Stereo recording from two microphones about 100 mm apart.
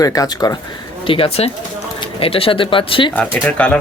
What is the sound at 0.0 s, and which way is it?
Speech, 40° left (ahead or behind).